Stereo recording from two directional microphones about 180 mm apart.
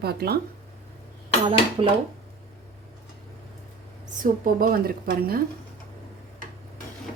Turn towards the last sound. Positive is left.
turn(degrees=-55)  # may be behind; listen again after turning